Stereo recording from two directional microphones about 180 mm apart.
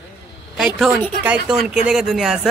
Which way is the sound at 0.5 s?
Centre (ahead or behind).